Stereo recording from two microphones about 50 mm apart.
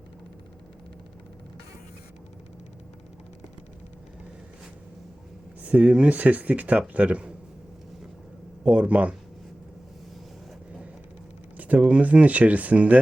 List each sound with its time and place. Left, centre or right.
5.6 s speech: right
8.6 s speech: right
11.5 s speech: right